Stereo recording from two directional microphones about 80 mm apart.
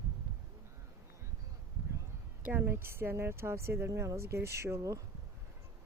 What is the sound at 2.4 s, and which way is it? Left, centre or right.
Speech, right.